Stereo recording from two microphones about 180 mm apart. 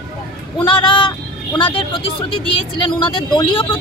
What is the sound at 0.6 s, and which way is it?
Speech, 30° left (ahead or behind).